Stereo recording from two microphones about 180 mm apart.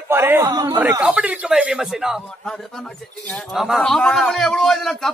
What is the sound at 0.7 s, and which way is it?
A man's voice, 10° right (ahead or behind).